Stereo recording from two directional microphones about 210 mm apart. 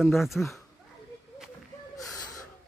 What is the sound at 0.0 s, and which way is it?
Speech, centre (ahead or behind).